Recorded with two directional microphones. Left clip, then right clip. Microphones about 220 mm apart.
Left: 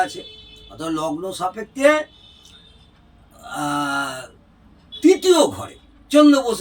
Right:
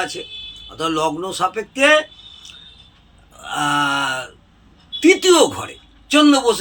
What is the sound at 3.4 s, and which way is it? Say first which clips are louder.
Speech: right 5 dB; centre (ahead or behind).